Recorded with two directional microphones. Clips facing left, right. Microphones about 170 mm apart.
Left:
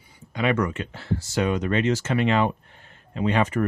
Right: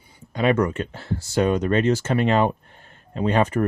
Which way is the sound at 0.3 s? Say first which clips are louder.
Right 3 dB; 35° right (ahead or behind).